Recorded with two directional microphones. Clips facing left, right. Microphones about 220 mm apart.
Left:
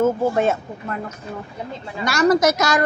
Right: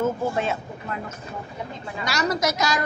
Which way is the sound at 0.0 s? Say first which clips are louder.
Left 6 dB; 50° left (ahead or behind).